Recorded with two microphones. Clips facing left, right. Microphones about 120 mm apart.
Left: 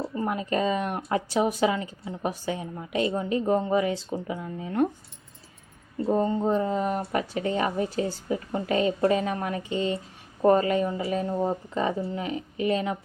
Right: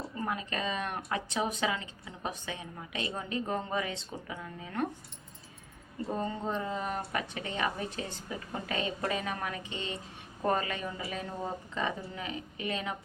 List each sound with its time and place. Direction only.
0.1 s a woman's voice: 30° left (ahead or behind)
6.1 s speech: 35° left (ahead or behind)